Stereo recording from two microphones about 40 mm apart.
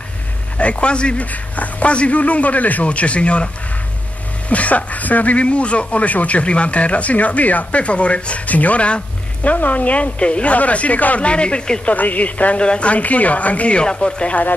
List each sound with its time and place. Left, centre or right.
0.6 s a man's voice: left
1.2 s speech: left
4.5 s speech: left
11.8 s speech: left
12.6 s a man's voice: left
12.9 s speech: left